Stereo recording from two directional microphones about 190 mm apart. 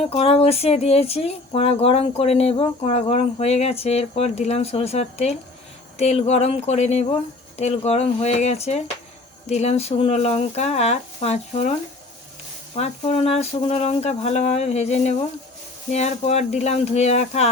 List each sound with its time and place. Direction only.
0.0 s speech: 35° left (ahead or behind)